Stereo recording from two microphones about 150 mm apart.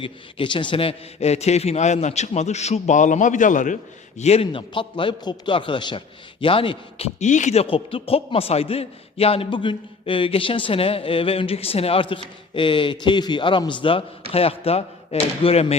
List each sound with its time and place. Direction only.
0.0 s a man's voice: 35° left (ahead or behind); by 3.8 s 60° left (ahead or behind)
4.2 s a man's voice: 45° left (ahead or behind)
7.2 s a man's voice: 55° left (ahead or behind)